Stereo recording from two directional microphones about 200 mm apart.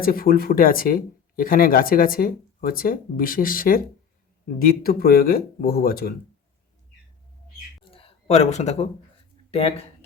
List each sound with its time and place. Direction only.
0.0 s speech: 45° left (ahead or behind)
7.9 s a sound: 30° left (ahead or behind)
9.5 s speech: 30° left (ahead or behind)